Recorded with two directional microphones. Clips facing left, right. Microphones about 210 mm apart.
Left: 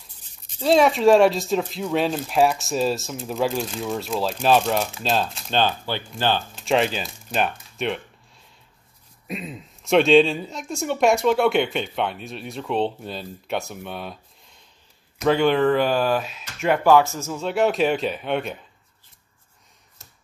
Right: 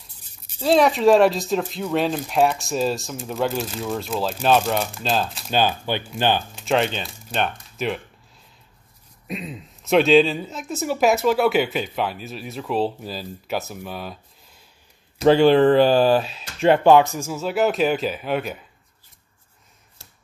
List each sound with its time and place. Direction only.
0.5 s speech: centre (ahead or behind)
6.6 s speech: centre (ahead or behind)
9.3 s speech: centre (ahead or behind)
15.1 s speech: 30° right (ahead or behind); by 18.6 s 5° right (ahead or behind)